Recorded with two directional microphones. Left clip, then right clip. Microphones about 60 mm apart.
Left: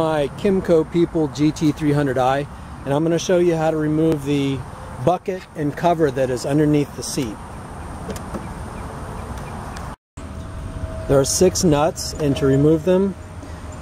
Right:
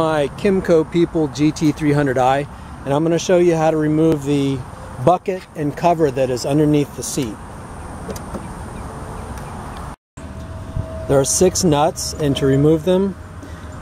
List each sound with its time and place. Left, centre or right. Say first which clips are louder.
0.0 s speech: right 2 dB; centre
11.1 s speech: right 1 dB; centre
12.4 s speech: right 1 dB; right
12.7 s speech: right 1 dB; centre